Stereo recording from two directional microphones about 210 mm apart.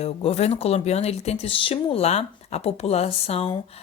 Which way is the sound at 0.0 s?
30° left (ahead or behind).